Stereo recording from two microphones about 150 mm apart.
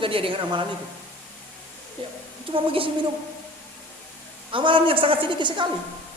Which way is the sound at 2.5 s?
35° right (ahead or behind).